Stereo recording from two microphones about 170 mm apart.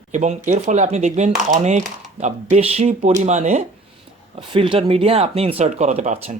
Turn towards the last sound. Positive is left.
turn(degrees=-40)  # may be behind; listen again after turning